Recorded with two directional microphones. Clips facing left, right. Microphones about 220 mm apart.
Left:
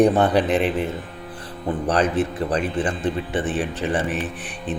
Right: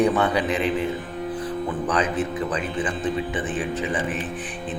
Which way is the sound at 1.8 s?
65° left (ahead or behind).